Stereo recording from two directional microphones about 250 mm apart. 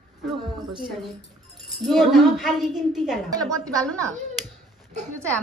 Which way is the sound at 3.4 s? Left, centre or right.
Centre.